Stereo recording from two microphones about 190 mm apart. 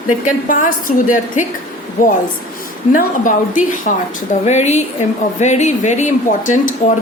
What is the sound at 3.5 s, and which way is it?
A woman's voice, 45° left (ahead or behind).